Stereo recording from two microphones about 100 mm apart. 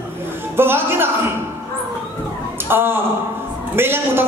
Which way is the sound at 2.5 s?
20° right (ahead or behind).